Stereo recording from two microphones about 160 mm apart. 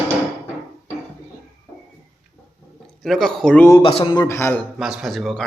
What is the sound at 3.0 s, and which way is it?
Speech, centre (ahead or behind).